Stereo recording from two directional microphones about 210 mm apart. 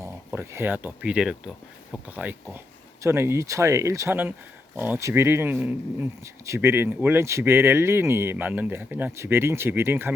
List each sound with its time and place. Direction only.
0.0 s speech: 10° right (ahead or behind)